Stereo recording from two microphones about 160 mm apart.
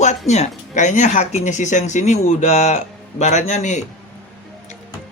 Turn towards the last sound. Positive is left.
turn(degrees=45)  # may be behind; listen again after turning